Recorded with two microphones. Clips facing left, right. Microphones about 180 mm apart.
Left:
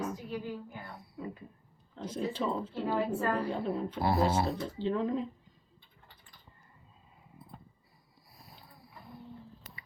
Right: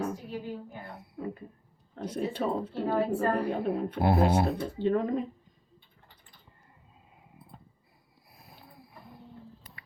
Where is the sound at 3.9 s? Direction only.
60° right (ahead or behind).